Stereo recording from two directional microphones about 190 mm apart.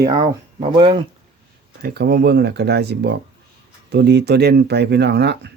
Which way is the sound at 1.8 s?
55° right (ahead or behind).